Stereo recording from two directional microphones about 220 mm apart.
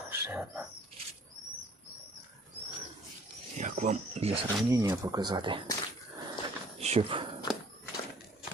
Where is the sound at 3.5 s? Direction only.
30° right (ahead or behind).